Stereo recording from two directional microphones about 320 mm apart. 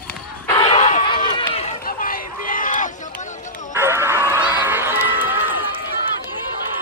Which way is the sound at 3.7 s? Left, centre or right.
Centre.